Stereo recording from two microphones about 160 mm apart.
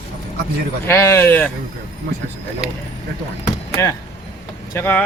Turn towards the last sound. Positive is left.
turn(degrees=10)  # may be behind; listen again after turning